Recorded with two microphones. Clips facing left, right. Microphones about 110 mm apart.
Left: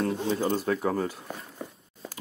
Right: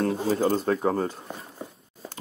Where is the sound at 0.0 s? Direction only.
40° right (ahead or behind).